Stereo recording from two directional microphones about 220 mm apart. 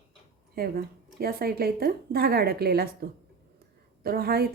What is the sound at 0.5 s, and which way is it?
A woman's voice, 45° right (ahead or behind).